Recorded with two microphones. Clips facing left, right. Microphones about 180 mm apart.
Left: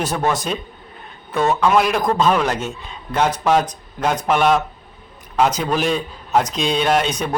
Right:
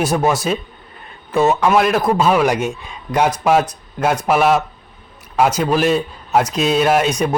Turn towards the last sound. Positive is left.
turn(degrees=-5)  # may be behind; listen again after turning